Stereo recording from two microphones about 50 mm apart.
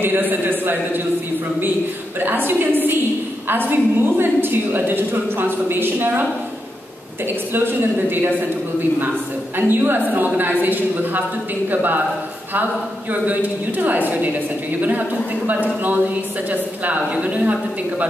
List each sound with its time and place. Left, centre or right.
0.0 s a woman's voice: right
2.1 s a woman's voice: right
7.5 s a woman's voice: right
9.6 s a woman's voice: right
13.1 s a woman's voice: right
16.8 s speech: right